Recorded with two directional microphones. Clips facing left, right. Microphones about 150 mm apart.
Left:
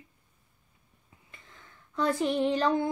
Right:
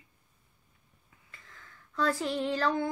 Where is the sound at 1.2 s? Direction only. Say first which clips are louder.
Left 1 dB; 20° left (ahead or behind).